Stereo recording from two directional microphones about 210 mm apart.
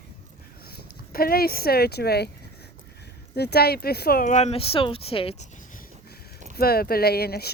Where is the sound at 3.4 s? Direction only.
50° left (ahead or behind); by 5.5 s 25° left (ahead or behind).